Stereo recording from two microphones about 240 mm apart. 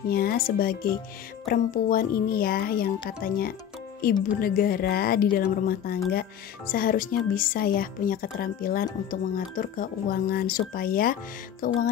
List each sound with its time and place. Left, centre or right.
0.1 s speech: left